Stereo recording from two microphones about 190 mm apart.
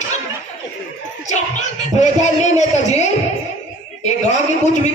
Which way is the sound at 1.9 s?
40° left (ahead or behind).